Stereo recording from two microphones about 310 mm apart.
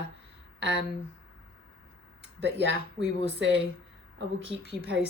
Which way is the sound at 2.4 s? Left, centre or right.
Right.